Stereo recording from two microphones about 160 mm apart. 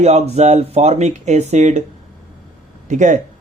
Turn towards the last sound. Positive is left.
turn(degrees=-50)  # may be behind; listen again after turning